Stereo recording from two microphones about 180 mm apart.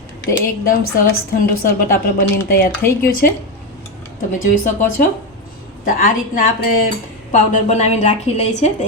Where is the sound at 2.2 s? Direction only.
55° left (ahead or behind).